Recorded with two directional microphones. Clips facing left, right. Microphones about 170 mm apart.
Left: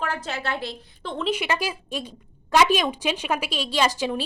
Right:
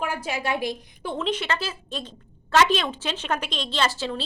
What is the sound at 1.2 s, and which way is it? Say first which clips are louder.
A woman's voice: left 4 dB; 10° left (ahead or behind).